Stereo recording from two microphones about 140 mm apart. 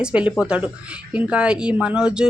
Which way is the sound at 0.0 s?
10° right (ahead or behind).